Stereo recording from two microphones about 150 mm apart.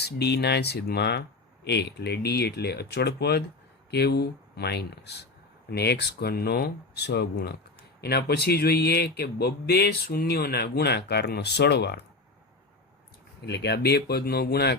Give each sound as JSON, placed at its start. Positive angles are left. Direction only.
{"t": 0.0, "sound": "speech", "side_deg": 90}
{"t": 13.4, "sound": "speech", "side_deg": 90}